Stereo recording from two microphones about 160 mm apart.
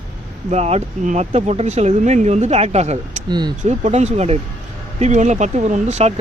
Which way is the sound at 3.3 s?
25° right (ahead or behind).